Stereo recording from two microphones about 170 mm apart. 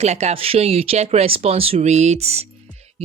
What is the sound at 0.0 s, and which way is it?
Speech, 40° right (ahead or behind).